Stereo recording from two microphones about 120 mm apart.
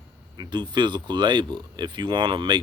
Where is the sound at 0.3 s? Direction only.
40° right (ahead or behind).